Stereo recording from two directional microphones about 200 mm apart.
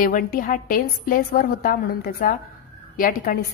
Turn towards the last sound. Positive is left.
turn(degrees=45)  # may be behind; listen again after turning